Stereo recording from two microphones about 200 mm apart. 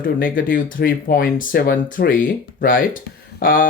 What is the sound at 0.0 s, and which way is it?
Speech, 45° left (ahead or behind).